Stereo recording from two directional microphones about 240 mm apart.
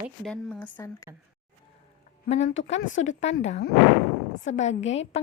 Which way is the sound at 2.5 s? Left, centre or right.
Left.